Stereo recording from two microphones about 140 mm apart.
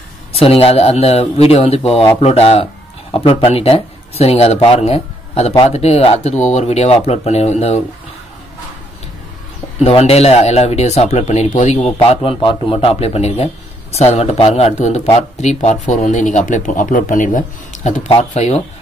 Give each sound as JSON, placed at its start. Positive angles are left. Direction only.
{"t": 0.3, "sound": "speech", "side_deg": 45}
{"t": 9.8, "sound": "a man's voice", "side_deg": 45}
{"t": 17.8, "sound": "speech", "side_deg": 50}